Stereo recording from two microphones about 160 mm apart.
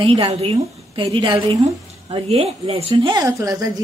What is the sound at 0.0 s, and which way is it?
A woman's voice, 35° right (ahead or behind).